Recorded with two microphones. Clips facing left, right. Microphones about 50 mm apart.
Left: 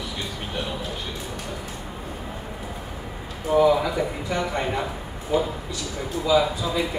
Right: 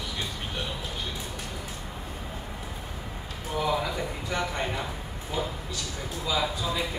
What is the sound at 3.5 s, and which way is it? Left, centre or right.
Speech, left.